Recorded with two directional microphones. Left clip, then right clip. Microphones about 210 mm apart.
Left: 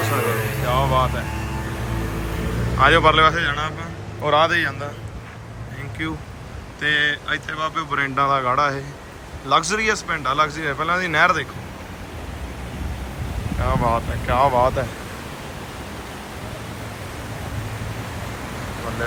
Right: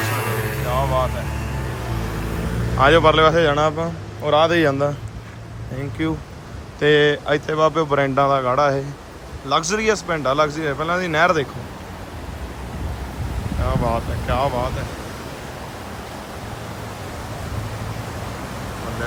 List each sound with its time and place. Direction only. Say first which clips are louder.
0.1 s music: left 2 dB; centre (ahead or behind)
2.7 s speech: right 1 dB; 20° right (ahead or behind)
4.2 s speech: right 1 dB; 15° right (ahead or behind)
6.0 s speech: right 3 dB; 25° right (ahead or behind)
13.6 s speech: left 2 dB; 10° right (ahead or behind)